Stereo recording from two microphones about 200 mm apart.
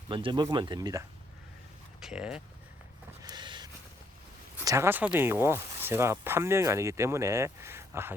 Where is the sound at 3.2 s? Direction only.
20° right (ahead or behind).